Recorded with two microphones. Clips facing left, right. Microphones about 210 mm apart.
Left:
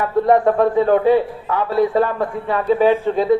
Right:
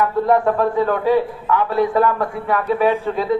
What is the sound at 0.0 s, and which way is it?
A man's voice, 30° left (ahead or behind).